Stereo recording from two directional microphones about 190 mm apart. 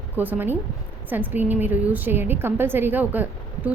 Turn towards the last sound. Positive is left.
turn(degrees=-10)  # may be behind; listen again after turning